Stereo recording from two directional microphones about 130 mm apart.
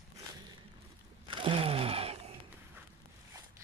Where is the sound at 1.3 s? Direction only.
40° right (ahead or behind).